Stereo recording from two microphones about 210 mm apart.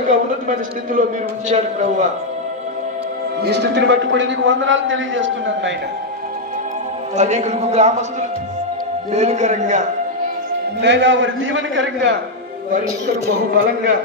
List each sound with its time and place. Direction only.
0.1 s a man's voice: 40° right (ahead or behind)
3.4 s a man's voice: 55° right (ahead or behind)
7.2 s a man's voice: 35° right (ahead or behind)
10.8 s a man's voice: 55° right (ahead or behind)